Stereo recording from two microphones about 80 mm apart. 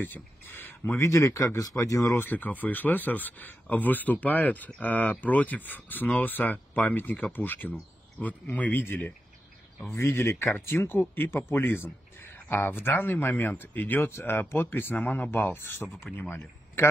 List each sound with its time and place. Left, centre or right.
0.0 s speech: left
0.9 s speech: left
2.1 s speech: left